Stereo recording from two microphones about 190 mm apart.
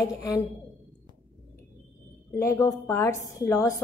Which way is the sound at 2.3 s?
15° left (ahead or behind).